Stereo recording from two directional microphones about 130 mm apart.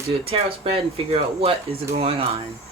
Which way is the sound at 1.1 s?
50° right (ahead or behind).